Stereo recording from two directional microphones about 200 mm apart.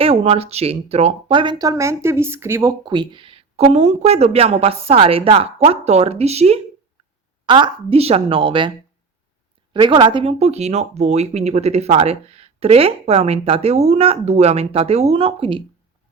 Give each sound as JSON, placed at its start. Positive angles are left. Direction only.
{"t": 0.0, "sound": "speech", "side_deg": -30}
{"t": 9.7, "sound": "speech", "side_deg": -25}